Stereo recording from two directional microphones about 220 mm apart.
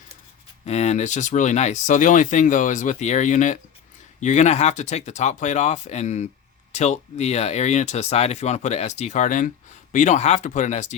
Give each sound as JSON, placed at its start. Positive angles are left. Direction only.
{"t": 0.6, "sound": "speech", "side_deg": 30}